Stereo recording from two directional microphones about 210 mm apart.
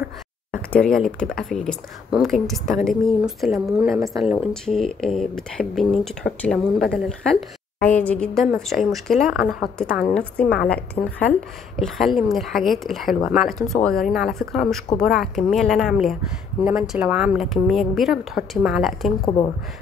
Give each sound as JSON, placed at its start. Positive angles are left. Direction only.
{"t": 0.5, "sound": "speech", "side_deg": 5}
{"t": 19.2, "sound": "speech", "side_deg": 20}